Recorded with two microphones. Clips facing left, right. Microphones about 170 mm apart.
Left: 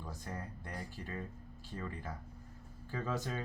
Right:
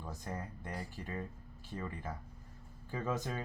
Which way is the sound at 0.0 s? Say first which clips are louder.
Right 2 dB; 20° right (ahead or behind).